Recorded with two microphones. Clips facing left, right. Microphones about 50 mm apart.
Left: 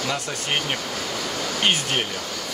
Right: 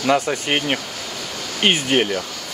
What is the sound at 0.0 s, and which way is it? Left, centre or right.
Speech, right.